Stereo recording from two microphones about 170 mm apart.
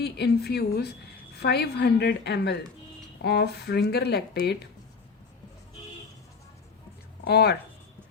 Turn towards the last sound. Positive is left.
turn(degrees=70)  # may be behind; listen again after turning